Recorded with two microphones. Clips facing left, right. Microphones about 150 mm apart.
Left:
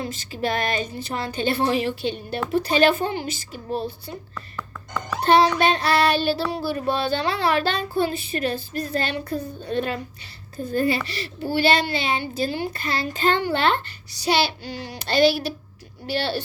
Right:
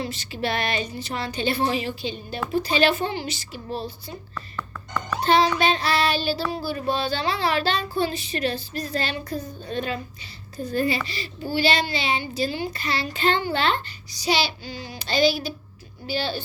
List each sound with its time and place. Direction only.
0.0 s a child's voice: 45° left (ahead or behind)
5.2 s child singing: 60° left (ahead or behind)
10.6 s a child's voice: 50° left (ahead or behind)
13.4 s child singing: 60° left (ahead or behind)
16.0 s a woman's voice: 65° left (ahead or behind)